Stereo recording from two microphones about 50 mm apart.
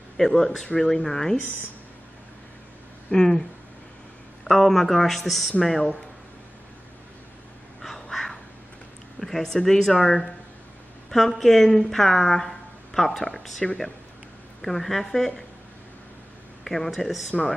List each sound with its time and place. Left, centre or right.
0.2 s speech: centre
3.1 s speech: centre
4.5 s a man's voice: centre
7.8 s crow: centre
9.2 s a woman's voice: centre
16.6 s a man's voice: centre